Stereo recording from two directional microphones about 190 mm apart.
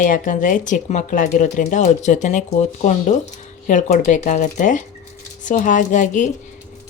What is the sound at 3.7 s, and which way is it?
A woman's voice, 40° left (ahead or behind).